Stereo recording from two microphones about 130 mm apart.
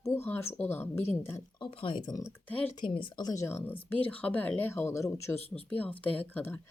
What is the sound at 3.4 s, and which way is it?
A woman's voice, 15° left (ahead or behind).